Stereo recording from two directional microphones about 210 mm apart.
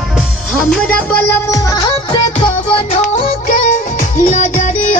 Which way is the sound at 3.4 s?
35° left (ahead or behind).